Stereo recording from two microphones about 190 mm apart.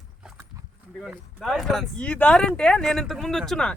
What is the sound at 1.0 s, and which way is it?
Speech, centre (ahead or behind).